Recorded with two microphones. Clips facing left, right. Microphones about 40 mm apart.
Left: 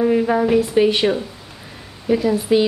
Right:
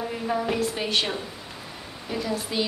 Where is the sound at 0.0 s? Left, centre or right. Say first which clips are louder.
Left 11 dB; left.